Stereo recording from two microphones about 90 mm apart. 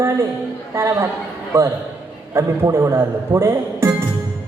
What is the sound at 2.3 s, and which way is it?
A man's voice, 30° right (ahead or behind).